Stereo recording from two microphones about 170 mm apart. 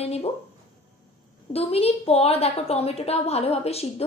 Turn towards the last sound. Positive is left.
turn(degrees=35)  # may be behind; listen again after turning